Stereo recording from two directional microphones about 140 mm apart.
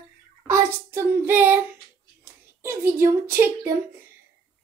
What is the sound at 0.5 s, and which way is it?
Child singing, 15° right (ahead or behind).